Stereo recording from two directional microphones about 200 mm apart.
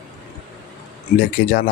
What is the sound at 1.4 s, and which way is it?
Speech, 45° left (ahead or behind).